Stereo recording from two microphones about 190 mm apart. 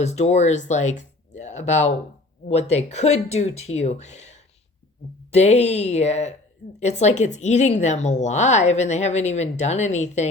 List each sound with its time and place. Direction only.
0.0 s a woman's voice: 35° left (ahead or behind)